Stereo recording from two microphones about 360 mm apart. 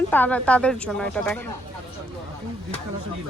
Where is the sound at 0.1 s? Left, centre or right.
Centre.